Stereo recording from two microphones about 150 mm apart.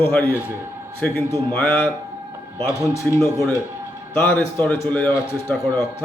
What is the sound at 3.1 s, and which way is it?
A man's voice, 10° left (ahead or behind).